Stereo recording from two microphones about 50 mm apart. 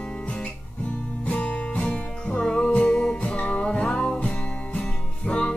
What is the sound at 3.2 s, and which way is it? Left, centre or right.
Music, left.